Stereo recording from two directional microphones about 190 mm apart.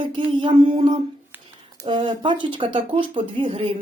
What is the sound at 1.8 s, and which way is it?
Speech, 25° right (ahead or behind).